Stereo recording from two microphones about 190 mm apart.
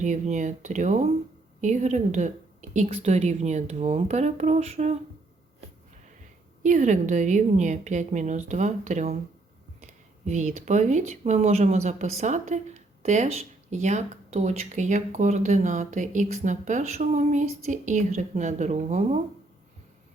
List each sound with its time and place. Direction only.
0.0 s speech: 40° right (ahead or behind)
6.6 s speech: 40° right (ahead or behind)